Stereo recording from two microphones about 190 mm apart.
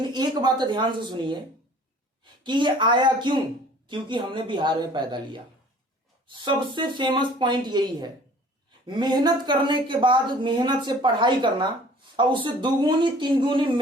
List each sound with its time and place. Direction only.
0.0 s a woman's voice: 20° right (ahead or behind)
2.4 s a woman's voice: 25° right (ahead or behind)